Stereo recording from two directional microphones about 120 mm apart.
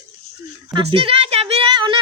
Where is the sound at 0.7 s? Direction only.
50° right (ahead or behind).